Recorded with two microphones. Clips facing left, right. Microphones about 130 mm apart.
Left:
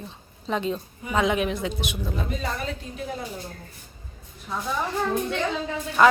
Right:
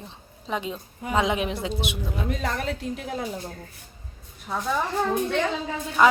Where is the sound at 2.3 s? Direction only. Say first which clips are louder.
Right 2 dB; 75° right (ahead or behind).